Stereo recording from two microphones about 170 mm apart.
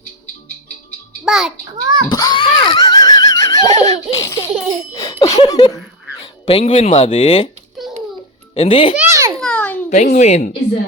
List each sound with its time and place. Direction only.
1.2 s a child's voice: centre (ahead or behind)
1.7 s speech: 20° right (ahead or behind)
2.0 s neigh: 25° left (ahead or behind)
4.2 s baby laughter: 15° left (ahead or behind)
4.9 s laughter: 20° left (ahead or behind)
5.4 s speech: 25° left (ahead or behind)
8.5 s speech: 35° left (ahead or behind)
9.0 s babbling: 15° right (ahead or behind)
9.4 s babbling: 5° left (ahead or behind)
9.9 s speech: 45° left (ahead or behind)